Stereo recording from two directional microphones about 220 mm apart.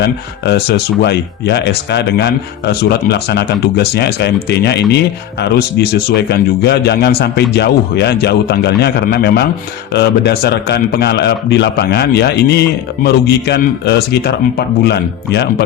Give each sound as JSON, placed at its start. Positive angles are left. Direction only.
{"t": 0.0, "sound": "speech", "side_deg": 45}